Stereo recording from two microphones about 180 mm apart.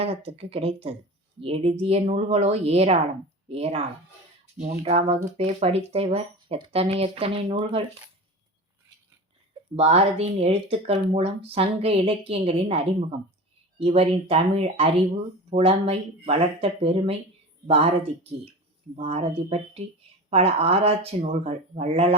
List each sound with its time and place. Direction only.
0.0 s speech: 35° right (ahead or behind)
9.7 s speech: 35° right (ahead or behind)